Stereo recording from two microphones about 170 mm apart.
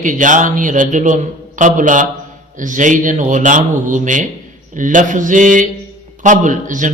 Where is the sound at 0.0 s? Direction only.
50° right (ahead or behind).